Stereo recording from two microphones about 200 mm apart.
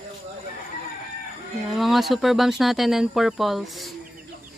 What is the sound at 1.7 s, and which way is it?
Speech, centre (ahead or behind).